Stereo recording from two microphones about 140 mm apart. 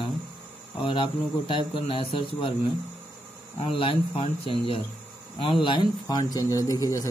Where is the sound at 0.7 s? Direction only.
40° left (ahead or behind).